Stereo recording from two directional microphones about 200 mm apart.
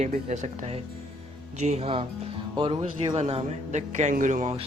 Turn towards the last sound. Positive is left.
turn(degrees=-35)  # may be behind; listen again after turning